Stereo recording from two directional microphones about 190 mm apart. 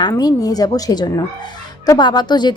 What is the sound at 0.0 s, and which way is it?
A woman's voice, 20° left (ahead or behind).